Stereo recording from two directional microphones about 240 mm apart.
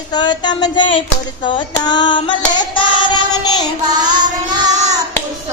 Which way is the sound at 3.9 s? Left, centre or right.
Centre.